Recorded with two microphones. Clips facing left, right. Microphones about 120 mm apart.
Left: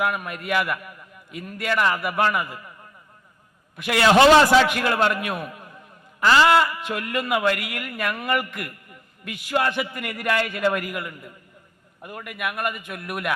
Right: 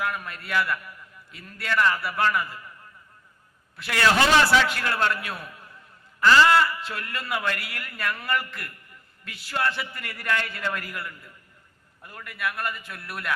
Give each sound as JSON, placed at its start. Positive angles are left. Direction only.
{"t": 0.0, "sound": "a man's voice", "side_deg": 15}
{"t": 3.8, "sound": "a man's voice", "side_deg": 20}